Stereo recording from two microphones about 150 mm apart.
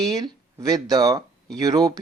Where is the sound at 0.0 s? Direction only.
25° right (ahead or behind).